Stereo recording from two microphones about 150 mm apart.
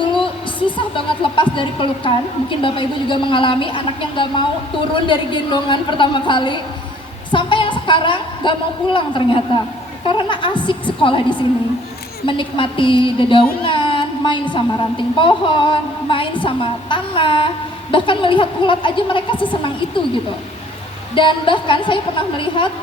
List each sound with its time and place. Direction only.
0.8 s a woman's voice: 35° left (ahead or behind)
21.2 s a woman's voice: 35° left (ahead or behind)